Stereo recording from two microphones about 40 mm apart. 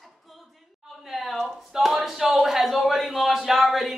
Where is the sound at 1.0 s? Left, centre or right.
Centre.